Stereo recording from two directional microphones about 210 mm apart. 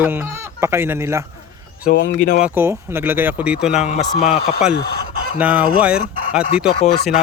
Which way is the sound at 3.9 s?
35° left (ahead or behind).